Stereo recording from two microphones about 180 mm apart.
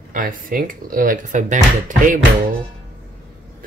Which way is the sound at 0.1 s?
50° right (ahead or behind).